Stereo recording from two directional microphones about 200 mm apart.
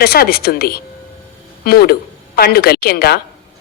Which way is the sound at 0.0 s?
50° left (ahead or behind).